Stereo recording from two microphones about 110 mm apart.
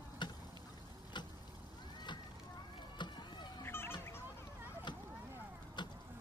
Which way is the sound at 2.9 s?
40° left (ahead or behind).